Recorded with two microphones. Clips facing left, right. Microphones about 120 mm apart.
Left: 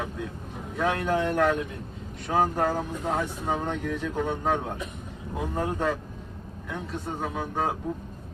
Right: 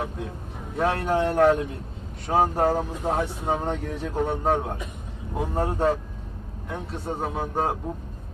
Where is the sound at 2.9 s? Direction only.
20° right (ahead or behind).